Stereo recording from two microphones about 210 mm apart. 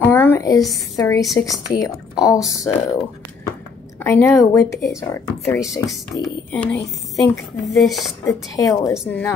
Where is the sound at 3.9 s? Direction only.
10° left (ahead or behind).